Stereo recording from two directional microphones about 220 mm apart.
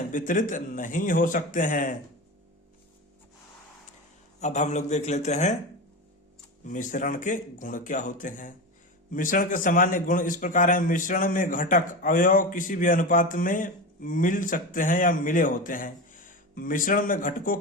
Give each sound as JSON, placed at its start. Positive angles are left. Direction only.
{"t": 0.1, "sound": "a man's voice", "side_deg": 35}
{"t": 4.4, "sound": "a man's voice", "side_deg": 30}
{"t": 6.7, "sound": "a man's voice", "side_deg": 35}